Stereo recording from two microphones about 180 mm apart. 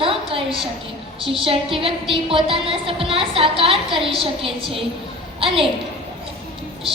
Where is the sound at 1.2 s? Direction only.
30° right (ahead or behind).